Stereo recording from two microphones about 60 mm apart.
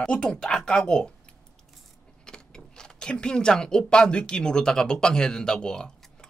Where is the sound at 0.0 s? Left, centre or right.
Centre.